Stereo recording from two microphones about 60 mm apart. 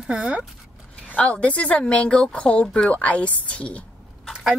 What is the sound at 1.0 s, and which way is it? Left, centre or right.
A woman's voice, left.